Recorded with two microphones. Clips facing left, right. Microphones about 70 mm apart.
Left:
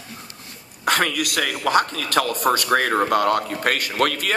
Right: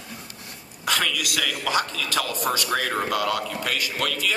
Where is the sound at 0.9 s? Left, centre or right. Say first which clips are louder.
Left 5 dB; left.